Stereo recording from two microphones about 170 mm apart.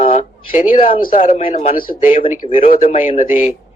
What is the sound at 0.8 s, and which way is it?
A man's voice, 30° left (ahead or behind).